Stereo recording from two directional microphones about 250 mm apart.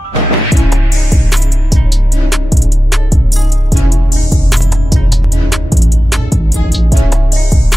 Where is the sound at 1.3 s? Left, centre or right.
Centre.